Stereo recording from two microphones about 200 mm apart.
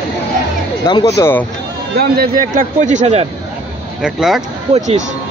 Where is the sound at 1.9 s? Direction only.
50° right (ahead or behind); by 3.3 s 35° right (ahead or behind).